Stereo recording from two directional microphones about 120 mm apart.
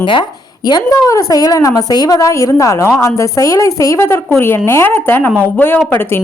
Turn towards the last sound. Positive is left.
turn(degrees=20)  # may be behind; listen again after turning